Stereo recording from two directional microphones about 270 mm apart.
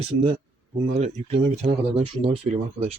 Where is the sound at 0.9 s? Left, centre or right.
Right.